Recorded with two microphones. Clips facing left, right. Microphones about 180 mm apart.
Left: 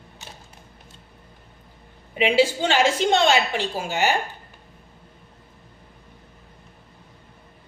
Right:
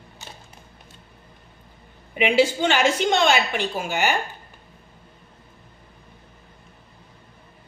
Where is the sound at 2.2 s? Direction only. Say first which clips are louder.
Even; 30° left (ahead or behind).